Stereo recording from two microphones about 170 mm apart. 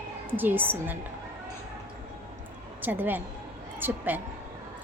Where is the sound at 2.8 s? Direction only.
10° right (ahead or behind).